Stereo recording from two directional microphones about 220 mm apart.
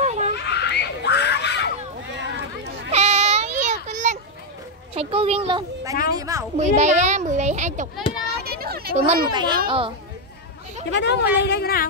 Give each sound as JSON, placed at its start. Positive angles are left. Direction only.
{"t": 0.0, "sound": "a sound", "side_deg": -30}
{"t": 0.4, "sound": "screaming", "side_deg": 50}
{"t": 2.9, "sound": "goat", "side_deg": -30}
{"t": 4.9, "sound": "a sound", "side_deg": -25}
{"t": 6.5, "sound": "a child's voice", "side_deg": -30}
{"t": 8.5, "sound": "a sound", "side_deg": -45}
{"t": 8.9, "sound": "a child's voice", "side_deg": -30}
{"t": 9.3, "sound": "a child's voice", "side_deg": -20}
{"t": 10.9, "sound": "speech", "side_deg": 50}